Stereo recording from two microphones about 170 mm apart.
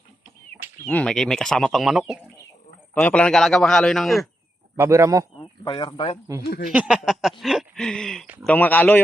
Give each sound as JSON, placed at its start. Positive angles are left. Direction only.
{"t": 0.9, "sound": "speech", "side_deg": 5}
{"t": 2.9, "sound": "speech", "side_deg": 10}
{"t": 4.8, "sound": "speech", "side_deg": -15}
{"t": 5.6, "sound": "speech", "side_deg": 30}
{"t": 6.7, "sound": "speech", "side_deg": -5}